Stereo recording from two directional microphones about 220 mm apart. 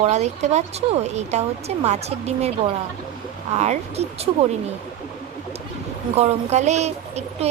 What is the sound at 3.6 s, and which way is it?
Speech, 30° right (ahead or behind).